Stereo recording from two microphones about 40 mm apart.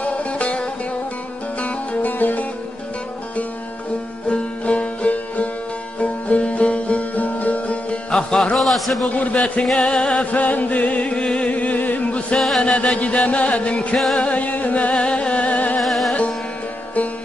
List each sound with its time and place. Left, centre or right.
0.0 s music: left
1.6 s music: left
4.3 s music: left
8.1 s music: centre
8.5 s a sound: centre
9.1 s music: left
12.4 s chant: centre
12.6 s music: left
15.0 s music: left
15.8 s music: centre